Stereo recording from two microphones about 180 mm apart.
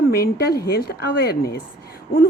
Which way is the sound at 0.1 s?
65° left (ahead or behind).